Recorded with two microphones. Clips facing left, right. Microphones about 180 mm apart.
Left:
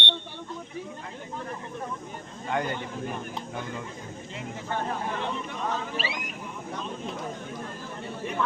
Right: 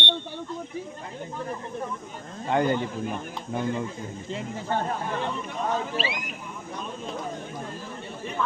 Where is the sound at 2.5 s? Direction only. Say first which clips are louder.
Right 6 dB; 30° right (ahead or behind).